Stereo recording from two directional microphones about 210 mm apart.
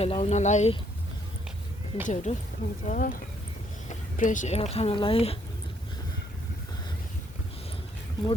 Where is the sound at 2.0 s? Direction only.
35° left (ahead or behind).